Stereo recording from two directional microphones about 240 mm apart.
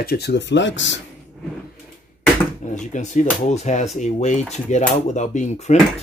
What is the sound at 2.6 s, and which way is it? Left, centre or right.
Speech, left.